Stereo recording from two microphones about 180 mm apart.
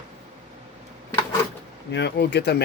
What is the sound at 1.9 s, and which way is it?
Speech, 70° left (ahead or behind).